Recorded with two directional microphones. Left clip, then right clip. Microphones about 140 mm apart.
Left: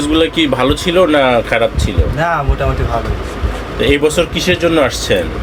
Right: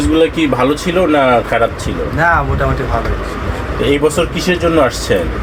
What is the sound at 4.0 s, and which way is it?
Speech, centre (ahead or behind).